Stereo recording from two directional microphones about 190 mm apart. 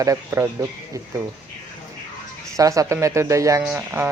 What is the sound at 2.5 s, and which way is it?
Speech, 15° right (ahead or behind).